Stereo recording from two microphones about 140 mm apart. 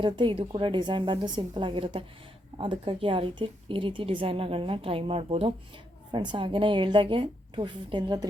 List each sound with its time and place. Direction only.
0.0 s a woman's voice: 35° right (ahead or behind)